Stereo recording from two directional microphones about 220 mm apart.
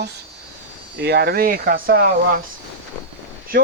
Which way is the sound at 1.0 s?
50° right (ahead or behind).